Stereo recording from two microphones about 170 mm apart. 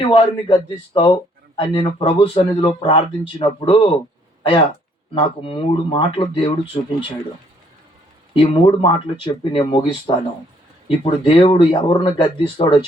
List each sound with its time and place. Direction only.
0.1 s speech: 30° left (ahead or behind)
8.3 s speech: 30° left (ahead or behind)